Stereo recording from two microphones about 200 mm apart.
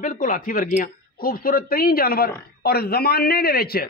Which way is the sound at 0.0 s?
40° left (ahead or behind).